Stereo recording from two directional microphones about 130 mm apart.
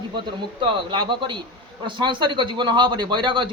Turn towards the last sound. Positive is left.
turn(degrees=-40)  # may be behind; listen again after turning